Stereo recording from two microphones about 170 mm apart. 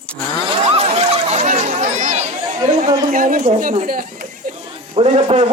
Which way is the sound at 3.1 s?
55° right (ahead or behind).